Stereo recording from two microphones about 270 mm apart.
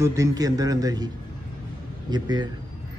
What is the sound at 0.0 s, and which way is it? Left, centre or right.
A man's voice, centre.